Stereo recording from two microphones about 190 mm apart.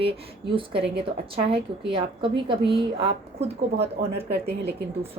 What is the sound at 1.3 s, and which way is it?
A woman's voice, 30° right (ahead or behind).